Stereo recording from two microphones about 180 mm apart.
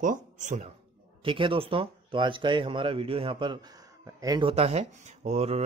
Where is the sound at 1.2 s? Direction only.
30° right (ahead or behind).